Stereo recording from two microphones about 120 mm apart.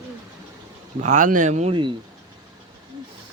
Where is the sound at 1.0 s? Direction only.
85° right.